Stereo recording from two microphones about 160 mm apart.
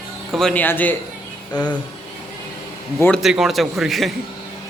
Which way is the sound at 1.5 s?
25° left (ahead or behind).